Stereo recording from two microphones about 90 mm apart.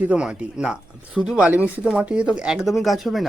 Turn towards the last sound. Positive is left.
turn(degrees=0)  # may be behind; listen again after turning